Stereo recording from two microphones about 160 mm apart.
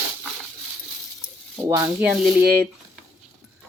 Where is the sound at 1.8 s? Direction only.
5° right (ahead or behind).